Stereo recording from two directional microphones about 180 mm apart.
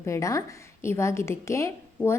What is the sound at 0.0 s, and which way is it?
A woman's voice, 15° left (ahead or behind).